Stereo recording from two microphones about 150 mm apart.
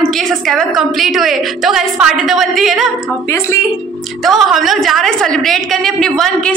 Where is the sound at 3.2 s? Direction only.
20° left (ahead or behind).